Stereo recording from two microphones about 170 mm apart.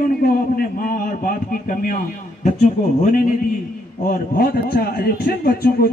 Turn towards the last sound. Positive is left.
turn(degrees=60)  # may be behind; listen again after turning